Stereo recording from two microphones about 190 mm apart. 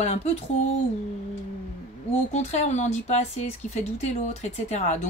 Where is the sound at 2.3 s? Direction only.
35° left (ahead or behind).